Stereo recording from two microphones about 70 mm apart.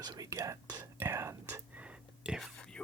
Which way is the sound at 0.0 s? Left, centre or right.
Right.